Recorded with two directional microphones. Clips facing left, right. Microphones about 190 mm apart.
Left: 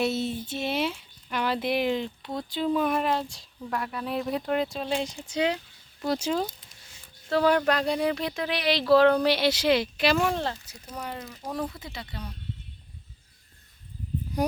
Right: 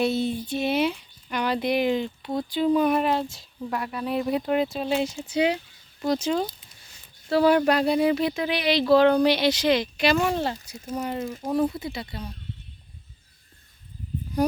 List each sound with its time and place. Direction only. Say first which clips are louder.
0.0 s speech: right 3 dB; centre (ahead or behind)
6.0 s speech: right 3 dB; 5° left (ahead or behind)
7.3 s speech: right 3 dB; 10° right (ahead or behind)
10.9 s speech: right 8 dB; 25° right (ahead or behind)
11.8 s speech: right 6 dB; 10° right (ahead or behind)